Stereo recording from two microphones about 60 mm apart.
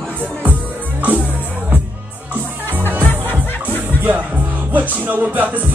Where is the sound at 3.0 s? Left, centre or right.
Left.